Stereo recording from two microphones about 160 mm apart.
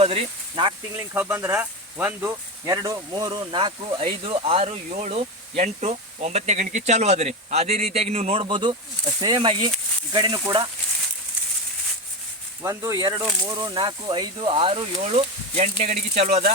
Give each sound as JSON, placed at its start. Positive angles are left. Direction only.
{"t": 0.0, "sound": "speech", "side_deg": -35}
{"t": 0.9, "sound": "speech", "side_deg": -10}
{"t": 12.6, "sound": "speech", "side_deg": -20}